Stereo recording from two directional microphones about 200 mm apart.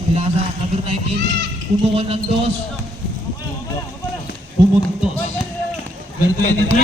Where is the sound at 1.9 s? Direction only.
30° right (ahead or behind).